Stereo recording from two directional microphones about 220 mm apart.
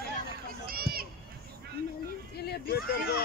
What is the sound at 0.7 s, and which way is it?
Run, 45° right (ahead or behind).